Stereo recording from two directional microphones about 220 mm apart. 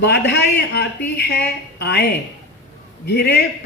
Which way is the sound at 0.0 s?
50° left (ahead or behind).